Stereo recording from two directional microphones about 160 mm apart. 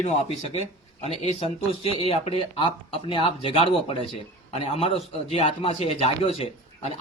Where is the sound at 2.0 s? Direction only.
35° left (ahead or behind).